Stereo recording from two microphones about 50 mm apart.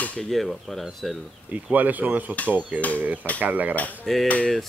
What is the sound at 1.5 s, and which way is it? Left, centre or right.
Speech, right.